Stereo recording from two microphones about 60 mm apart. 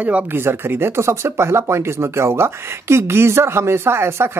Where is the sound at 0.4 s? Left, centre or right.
Right.